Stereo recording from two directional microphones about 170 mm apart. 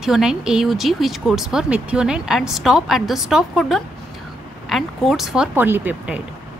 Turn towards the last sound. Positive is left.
turn(degrees=-10)  # may be behind; listen again after turning